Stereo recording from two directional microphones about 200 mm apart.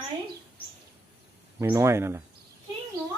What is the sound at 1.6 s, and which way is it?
Speech, 15° right (ahead or behind).